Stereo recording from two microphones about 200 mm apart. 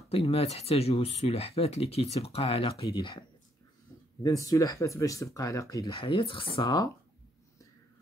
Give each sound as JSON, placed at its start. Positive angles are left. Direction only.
{"t": 0.1, "sound": "speech", "side_deg": 30}